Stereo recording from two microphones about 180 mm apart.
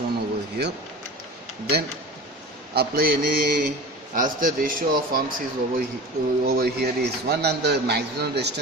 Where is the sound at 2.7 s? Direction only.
55° right (ahead or behind).